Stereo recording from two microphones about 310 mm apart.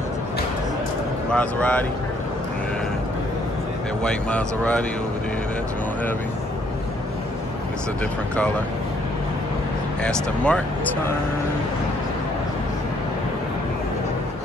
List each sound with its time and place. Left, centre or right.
1.3 s speech: centre
4.0 s speech: centre
10.0 s speech: centre